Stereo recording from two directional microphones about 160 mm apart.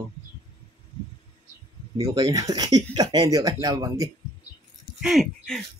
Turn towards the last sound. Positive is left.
turn(degrees=0)  # may be behind; listen again after turning